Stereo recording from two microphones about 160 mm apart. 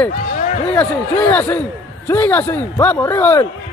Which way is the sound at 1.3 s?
10° left (ahead or behind).